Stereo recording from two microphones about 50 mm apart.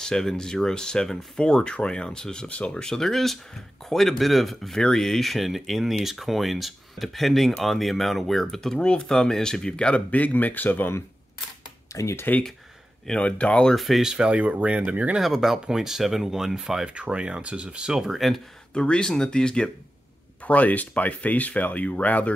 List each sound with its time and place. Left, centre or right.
0.0 s speech: centre; by 10.9 s left
11.9 s speech: left
13.2 s speech: left
13.7 s speech: centre
14.1 s speech: centre
14.4 s speech: right
15.1 s speech: centre
16.9 s speech: right
18.0 s speech: centre
18.7 s speech: centre
20.4 s speech: left